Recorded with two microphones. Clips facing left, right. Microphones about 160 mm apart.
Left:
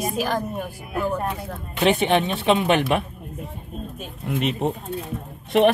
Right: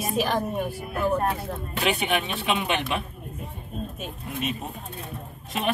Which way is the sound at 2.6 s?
55° left (ahead or behind).